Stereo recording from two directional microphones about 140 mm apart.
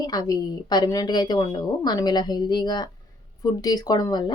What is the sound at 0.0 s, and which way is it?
A woman's voice, 30° left (ahead or behind).